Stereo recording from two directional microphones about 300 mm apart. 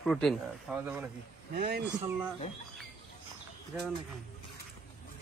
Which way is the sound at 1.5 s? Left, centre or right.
Right.